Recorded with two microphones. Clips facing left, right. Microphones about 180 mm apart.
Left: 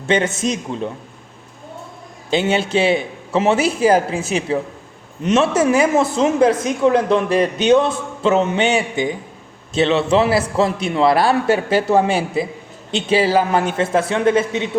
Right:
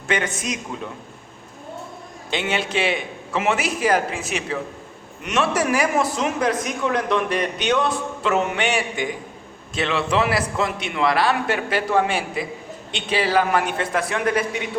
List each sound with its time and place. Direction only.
0.1 s a woman's voice: 25° left (ahead or behind)
2.3 s a woman's voice: 30° left (ahead or behind)